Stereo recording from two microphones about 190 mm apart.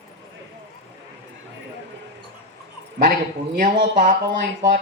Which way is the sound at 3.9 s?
40° right (ahead or behind).